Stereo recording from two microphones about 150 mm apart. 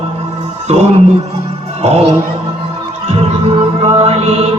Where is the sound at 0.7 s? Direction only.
45° right (ahead or behind).